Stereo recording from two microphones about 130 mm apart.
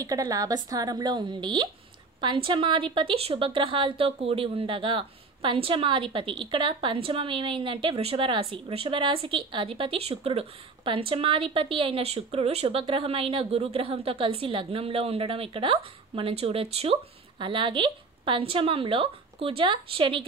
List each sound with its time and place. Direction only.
0.0 s a woman's voice: 25° right (ahead or behind); by 20.2 s 45° right (ahead or behind)